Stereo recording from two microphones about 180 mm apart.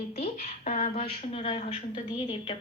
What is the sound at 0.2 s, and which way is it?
A woman's voice, 40° left (ahead or behind).